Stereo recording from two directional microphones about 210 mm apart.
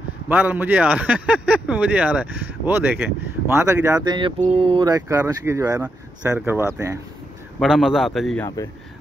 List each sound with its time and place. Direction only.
0.3 s speech: 10° right (ahead or behind)
7.6 s a man's voice: centre (ahead or behind)